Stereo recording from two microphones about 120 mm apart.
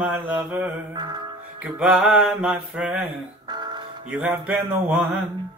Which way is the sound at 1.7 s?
5° right (ahead or behind).